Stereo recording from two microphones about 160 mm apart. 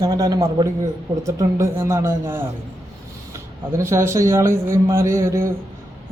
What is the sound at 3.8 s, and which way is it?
A man's voice, 20° right (ahead or behind).